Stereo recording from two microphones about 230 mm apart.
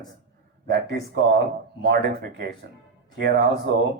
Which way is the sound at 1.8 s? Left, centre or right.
Right.